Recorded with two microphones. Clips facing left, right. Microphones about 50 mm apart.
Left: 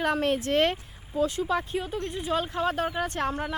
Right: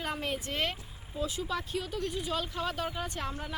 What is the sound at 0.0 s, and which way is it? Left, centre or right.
Speech, left.